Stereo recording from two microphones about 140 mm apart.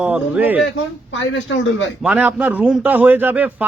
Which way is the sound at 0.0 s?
10° right (ahead or behind).